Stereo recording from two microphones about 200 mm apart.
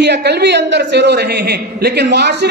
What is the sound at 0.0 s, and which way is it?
A man's voice, 60° right (ahead or behind).